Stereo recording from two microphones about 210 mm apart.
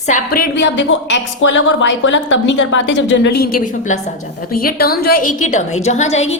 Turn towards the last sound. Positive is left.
turn(degrees=30)  # may be behind; listen again after turning